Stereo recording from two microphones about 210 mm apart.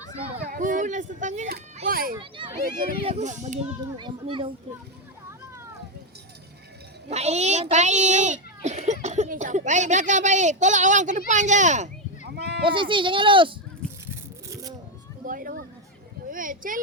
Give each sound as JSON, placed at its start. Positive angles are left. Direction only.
{"t": 0.4, "sound": "a child's voice", "side_deg": -40}
{"t": 3.0, "sound": "a child's voice", "side_deg": -30}
{"t": 3.9, "sound": "a child's voice", "side_deg": -25}
{"t": 7.1, "sound": "a child's voice", "side_deg": -30}
{"t": 12.3, "sound": "sheep", "side_deg": -50}
{"t": 12.6, "sound": "a child's voice", "side_deg": -25}
{"t": 15.2, "sound": "a sound", "side_deg": -40}
{"t": 16.3, "sound": "a child's voice", "side_deg": -40}